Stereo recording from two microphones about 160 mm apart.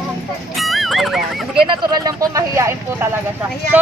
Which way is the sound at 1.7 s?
25° right (ahead or behind).